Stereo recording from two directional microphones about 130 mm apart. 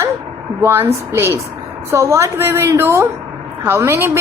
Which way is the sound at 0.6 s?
20° right (ahead or behind).